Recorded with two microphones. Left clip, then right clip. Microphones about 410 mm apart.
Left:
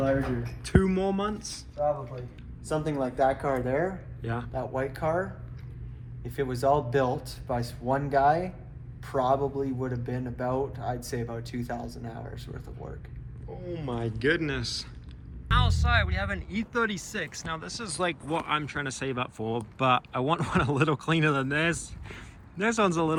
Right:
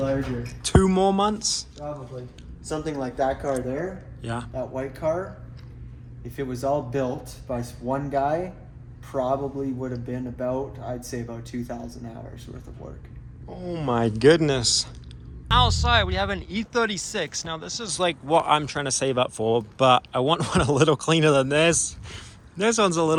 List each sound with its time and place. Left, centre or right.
0.6 s speech: centre
2.6 s speech: centre
4.2 s speech: centre
6.3 s speech: centre
13.7 s speech: centre